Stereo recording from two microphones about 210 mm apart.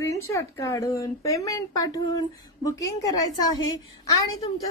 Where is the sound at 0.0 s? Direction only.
15° left (ahead or behind).